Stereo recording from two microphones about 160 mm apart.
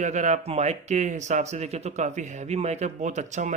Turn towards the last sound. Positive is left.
turn(degrees=-50)  # may be behind; listen again after turning